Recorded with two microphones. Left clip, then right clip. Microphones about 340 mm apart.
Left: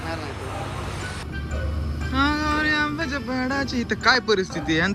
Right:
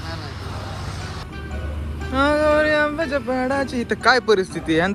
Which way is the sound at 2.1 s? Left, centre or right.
Centre.